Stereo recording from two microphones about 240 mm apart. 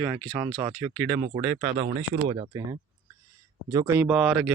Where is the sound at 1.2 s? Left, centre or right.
Right.